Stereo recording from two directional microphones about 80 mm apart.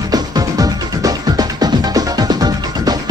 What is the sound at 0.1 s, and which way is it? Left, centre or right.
Music, right.